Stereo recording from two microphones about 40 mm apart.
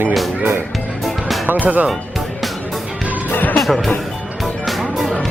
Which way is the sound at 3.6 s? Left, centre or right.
Centre.